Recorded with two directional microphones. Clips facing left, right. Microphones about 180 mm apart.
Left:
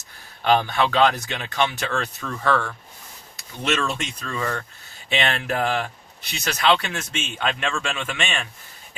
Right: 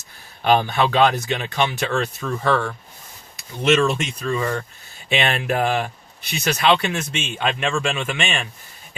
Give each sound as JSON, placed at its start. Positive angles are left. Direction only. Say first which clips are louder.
{"t": 0.4, "sound": "speech", "louder": "right 2 dB", "side_deg": -15}
{"t": 3.8, "sound": "speech", "louder": "right 7 dB", "side_deg": -10}